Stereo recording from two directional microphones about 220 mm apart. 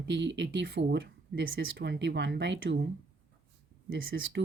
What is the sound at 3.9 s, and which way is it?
Speech, 60° right (ahead or behind).